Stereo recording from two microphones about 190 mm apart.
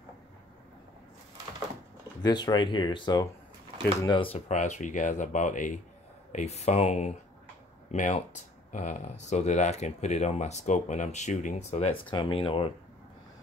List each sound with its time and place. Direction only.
2.2 s speech: 20° left (ahead or behind)